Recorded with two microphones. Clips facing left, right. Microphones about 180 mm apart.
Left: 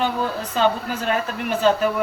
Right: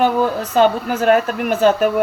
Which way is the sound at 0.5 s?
50° right (ahead or behind).